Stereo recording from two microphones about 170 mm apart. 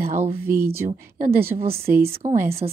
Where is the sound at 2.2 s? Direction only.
35° right (ahead or behind).